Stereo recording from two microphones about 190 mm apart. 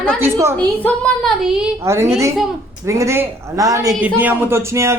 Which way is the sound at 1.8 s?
15° right (ahead or behind).